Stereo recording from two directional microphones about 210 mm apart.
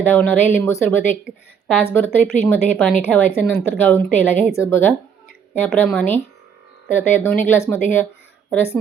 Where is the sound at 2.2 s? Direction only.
5° left (ahead or behind).